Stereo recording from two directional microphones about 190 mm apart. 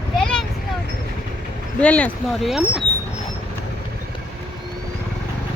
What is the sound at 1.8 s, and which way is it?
Speech, 5° left (ahead or behind).